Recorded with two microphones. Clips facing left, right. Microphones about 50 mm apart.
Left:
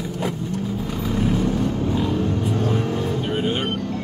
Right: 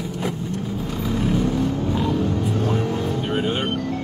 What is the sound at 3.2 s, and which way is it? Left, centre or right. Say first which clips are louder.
Music: even; centre.